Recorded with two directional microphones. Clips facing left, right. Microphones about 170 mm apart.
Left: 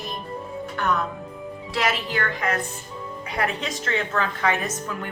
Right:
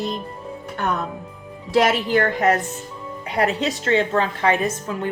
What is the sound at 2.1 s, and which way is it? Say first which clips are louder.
Speech: right 8 dB; 40° right (ahead or behind).